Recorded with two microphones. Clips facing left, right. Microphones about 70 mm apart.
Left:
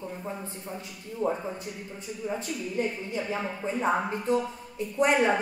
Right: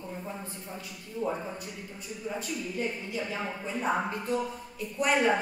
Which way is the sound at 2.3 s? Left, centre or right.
Left.